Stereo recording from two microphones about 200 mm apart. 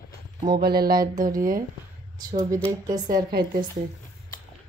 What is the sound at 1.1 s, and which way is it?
Speech, 20° right (ahead or behind).